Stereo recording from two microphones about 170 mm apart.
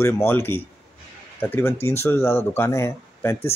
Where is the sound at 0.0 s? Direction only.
15° left (ahead or behind).